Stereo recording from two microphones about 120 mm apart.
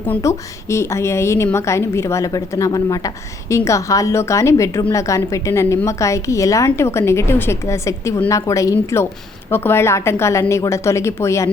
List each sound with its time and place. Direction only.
0.2 s a woman's voice: 25° left (ahead or behind)